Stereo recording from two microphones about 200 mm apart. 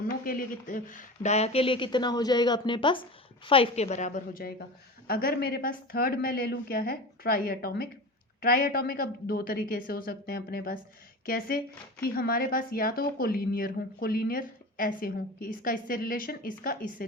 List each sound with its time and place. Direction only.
0.3 s speech: 45° left (ahead or behind)